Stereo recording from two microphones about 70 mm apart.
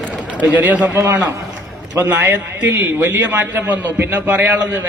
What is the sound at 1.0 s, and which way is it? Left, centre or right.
A man's voice, right.